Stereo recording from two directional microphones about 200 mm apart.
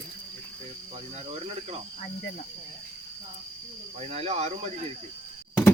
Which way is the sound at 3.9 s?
30° right (ahead or behind).